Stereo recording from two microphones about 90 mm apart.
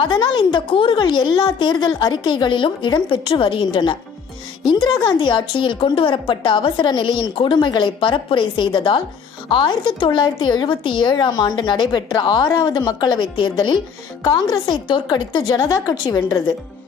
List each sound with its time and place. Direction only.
0.0 s speech: 65° left (ahead or behind)
14.3 s a woman's voice: 50° left (ahead or behind)
14.8 s speech: 70° left (ahead or behind)
16.0 s a woman's voice: 50° left (ahead or behind)